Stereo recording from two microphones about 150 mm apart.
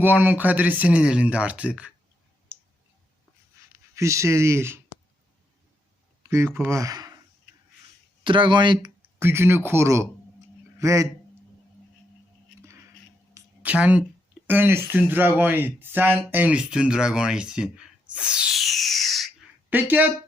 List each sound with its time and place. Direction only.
0.0 s speech: 10° right (ahead or behind)
3.9 s speech: 20° right (ahead or behind)
6.2 s speech: 15° right (ahead or behind)
8.2 s speech: 30° right (ahead or behind)
9.1 s speech: 15° right (ahead or behind)
13.3 s a sound: 10° right (ahead or behind)
14.4 s speech: 10° right (ahead or behind)
18.1 s a sound: 5° right (ahead or behind)
19.7 s speech: 10° right (ahead or behind)